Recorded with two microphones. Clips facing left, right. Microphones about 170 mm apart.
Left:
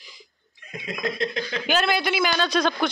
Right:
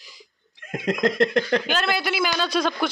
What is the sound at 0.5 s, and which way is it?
Speech, 90° right.